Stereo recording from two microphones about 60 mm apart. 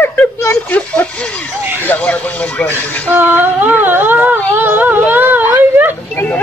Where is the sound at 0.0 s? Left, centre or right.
Left.